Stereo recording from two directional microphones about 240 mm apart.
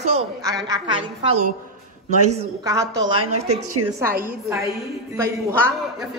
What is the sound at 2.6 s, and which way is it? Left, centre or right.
Speech, centre.